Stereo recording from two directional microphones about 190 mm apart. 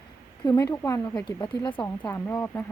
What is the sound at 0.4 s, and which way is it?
Speech, 15° left (ahead or behind).